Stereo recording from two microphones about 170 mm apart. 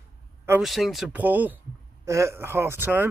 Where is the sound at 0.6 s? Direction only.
Centre (ahead or behind).